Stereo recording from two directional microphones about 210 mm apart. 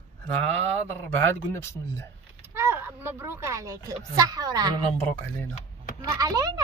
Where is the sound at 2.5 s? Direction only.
10° right (ahead or behind).